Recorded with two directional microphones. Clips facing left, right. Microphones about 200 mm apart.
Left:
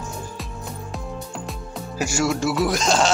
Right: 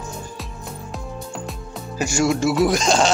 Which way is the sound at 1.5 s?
5° left (ahead or behind).